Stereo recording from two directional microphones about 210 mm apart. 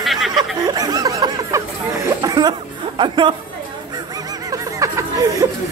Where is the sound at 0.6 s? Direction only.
15° right (ahead or behind).